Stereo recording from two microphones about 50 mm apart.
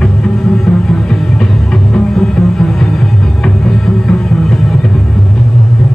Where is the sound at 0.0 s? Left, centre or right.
Centre.